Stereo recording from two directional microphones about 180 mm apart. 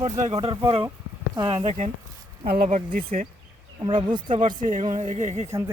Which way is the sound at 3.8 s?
25° right (ahead or behind).